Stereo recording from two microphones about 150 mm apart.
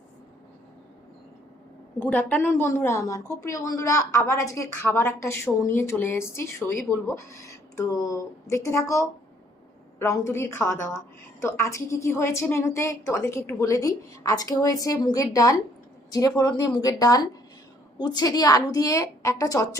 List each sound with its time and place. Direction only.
2.0 s a woman's voice: 10° left (ahead or behind)